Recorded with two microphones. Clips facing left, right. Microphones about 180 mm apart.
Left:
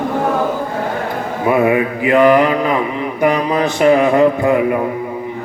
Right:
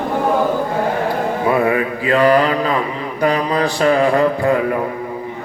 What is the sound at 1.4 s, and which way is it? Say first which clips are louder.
Mantra: left 4 dB; 20° left (ahead or behind).